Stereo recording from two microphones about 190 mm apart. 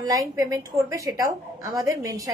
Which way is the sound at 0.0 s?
20° right (ahead or behind).